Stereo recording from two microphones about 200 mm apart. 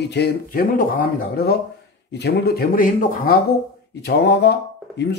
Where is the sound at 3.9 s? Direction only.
55° left (ahead or behind).